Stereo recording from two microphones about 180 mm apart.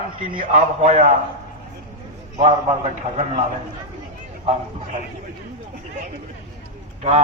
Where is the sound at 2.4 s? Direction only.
35° right (ahead or behind).